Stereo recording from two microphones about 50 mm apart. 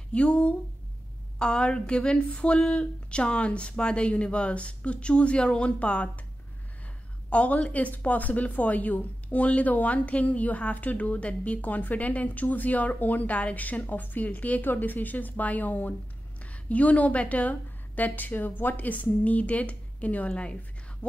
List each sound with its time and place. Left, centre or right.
0.1 s a woman's voice: left
7.2 s a woman's voice: left